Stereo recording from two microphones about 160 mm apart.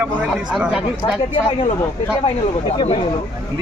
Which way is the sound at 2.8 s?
40° left (ahead or behind).